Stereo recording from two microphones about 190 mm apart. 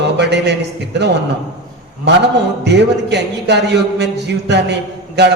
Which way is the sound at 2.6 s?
65° right (ahead or behind).